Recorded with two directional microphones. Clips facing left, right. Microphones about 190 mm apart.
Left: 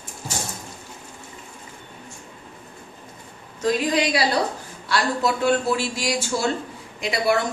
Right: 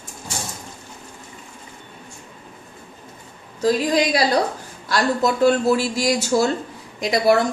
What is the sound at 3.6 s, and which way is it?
A man's voice, 40° right (ahead or behind).